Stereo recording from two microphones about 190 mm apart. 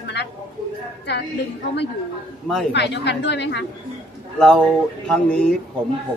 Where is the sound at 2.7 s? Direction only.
65° left (ahead or behind).